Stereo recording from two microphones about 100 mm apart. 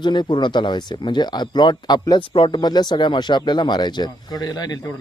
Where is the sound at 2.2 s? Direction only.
60° left (ahead or behind).